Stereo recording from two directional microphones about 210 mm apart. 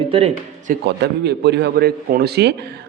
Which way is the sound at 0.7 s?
55° right (ahead or behind).